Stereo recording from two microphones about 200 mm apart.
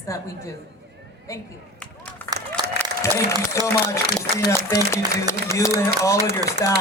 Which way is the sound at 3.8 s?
15° left (ahead or behind).